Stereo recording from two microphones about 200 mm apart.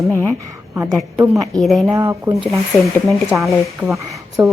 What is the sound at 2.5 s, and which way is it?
Speech, centre (ahead or behind).